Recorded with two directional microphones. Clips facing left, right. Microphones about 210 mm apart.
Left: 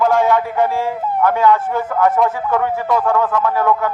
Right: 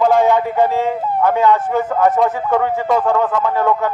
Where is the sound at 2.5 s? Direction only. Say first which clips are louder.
Right 1 dB; 20° right (ahead or behind).